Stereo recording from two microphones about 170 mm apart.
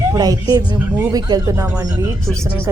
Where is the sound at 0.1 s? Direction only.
20° right (ahead or behind).